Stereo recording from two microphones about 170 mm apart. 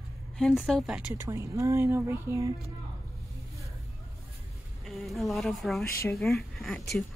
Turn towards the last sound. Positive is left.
turn(degrees=0)  # may be behind; listen again after turning